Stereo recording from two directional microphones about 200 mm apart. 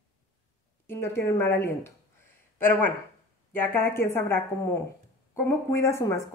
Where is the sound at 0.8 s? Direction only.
10° left (ahead or behind).